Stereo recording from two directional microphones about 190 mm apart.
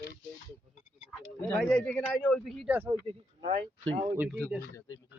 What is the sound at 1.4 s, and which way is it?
A man's voice, 5° left (ahead or behind).